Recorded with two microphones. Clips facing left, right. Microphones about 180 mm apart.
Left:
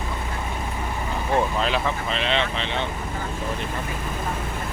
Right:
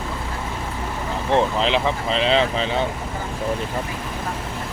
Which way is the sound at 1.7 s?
35° right (ahead or behind).